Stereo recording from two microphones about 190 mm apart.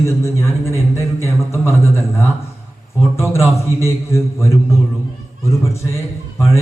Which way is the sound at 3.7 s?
15° left (ahead or behind).